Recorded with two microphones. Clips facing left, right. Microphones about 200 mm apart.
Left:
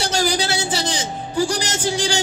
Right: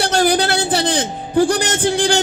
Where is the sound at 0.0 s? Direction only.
55° right (ahead or behind).